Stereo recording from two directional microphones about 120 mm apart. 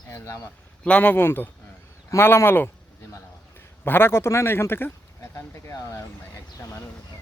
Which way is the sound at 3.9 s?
20° left (ahead or behind).